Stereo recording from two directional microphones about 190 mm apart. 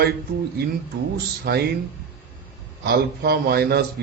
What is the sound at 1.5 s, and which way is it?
Speech, 55° right (ahead or behind).